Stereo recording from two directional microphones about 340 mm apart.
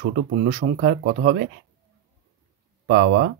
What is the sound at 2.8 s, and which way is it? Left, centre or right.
Speech, right.